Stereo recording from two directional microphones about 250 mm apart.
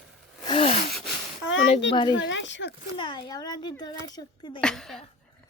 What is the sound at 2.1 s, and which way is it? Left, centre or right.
Speech, left.